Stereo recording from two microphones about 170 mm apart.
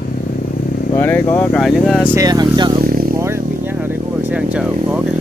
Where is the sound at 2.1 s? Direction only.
20° right (ahead or behind).